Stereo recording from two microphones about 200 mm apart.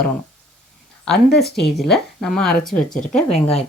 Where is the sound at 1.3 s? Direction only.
Centre (ahead or behind).